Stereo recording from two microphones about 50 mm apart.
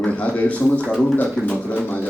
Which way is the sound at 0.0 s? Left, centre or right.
Left.